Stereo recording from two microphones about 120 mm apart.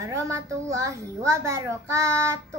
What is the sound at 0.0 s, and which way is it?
Child singing, 25° right (ahead or behind).